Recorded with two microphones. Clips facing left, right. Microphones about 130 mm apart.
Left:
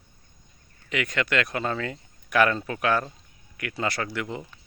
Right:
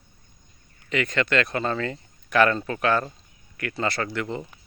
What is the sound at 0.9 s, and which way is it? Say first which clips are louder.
Speech: right 3 dB; 10° left (ahead or behind).